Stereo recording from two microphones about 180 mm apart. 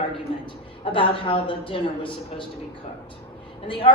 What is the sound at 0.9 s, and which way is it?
A woman's voice, 30° left (ahead or behind).